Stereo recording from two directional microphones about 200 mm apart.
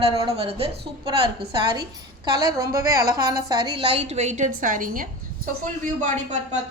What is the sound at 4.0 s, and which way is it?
A woman's voice, 35° right (ahead or behind).